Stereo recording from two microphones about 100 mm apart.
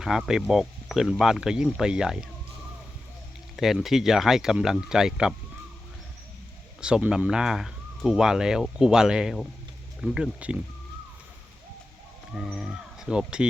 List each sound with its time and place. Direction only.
0.3 s speech: 5° right (ahead or behind)
3.5 s speech: 5° right (ahead or behind)
6.8 s speech: 10° right (ahead or behind)
12.4 s speech: centre (ahead or behind)